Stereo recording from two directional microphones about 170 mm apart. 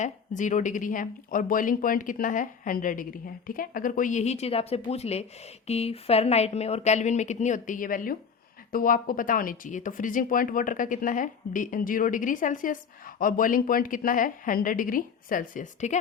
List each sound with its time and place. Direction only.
0.0 s speech: 50° left (ahead or behind)